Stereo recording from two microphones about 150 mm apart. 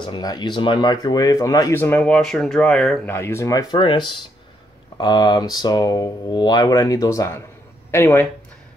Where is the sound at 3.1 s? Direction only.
15° left (ahead or behind).